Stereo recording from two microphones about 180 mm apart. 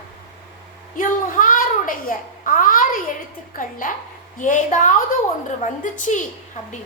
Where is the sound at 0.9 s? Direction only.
50° left (ahead or behind).